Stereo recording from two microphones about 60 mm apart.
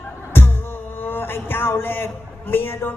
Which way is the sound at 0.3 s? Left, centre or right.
Left.